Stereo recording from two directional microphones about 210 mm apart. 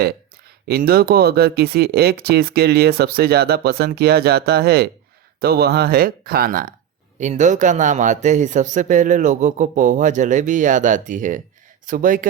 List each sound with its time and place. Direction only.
0.7 s a man's voice: 45° right (ahead or behind)